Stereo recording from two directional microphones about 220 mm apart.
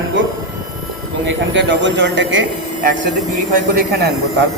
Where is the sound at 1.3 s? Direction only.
55° right (ahead or behind).